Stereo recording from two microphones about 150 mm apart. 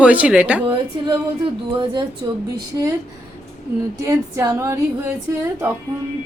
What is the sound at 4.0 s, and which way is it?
Speech, 20° right (ahead or behind).